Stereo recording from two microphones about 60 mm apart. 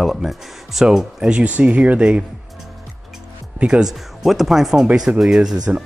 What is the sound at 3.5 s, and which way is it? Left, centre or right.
Speech, centre.